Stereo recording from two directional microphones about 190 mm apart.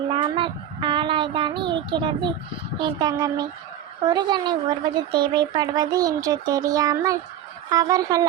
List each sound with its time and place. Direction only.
0.2 s child singing: 25° right (ahead or behind)
2.8 s speech: 20° right (ahead or behind)